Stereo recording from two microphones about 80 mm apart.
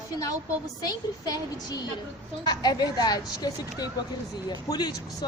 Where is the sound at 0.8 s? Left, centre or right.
Left.